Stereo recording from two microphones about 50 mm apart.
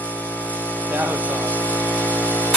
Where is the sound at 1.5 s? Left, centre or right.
Left.